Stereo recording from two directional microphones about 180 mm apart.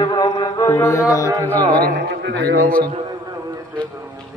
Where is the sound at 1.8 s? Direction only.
60° right (ahead or behind).